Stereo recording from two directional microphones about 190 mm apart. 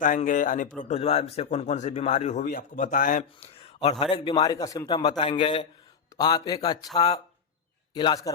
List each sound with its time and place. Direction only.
0.0 s a man's voice: 45° left (ahead or behind)
3.6 s a sound: 30° left (ahead or behind)
4.0 s a man's voice: 25° left (ahead or behind)